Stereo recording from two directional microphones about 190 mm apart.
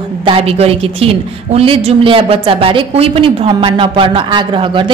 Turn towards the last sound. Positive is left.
turn(degrees=-25)  # may be behind; listen again after turning